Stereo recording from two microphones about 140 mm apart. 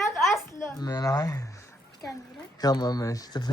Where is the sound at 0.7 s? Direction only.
30° left (ahead or behind).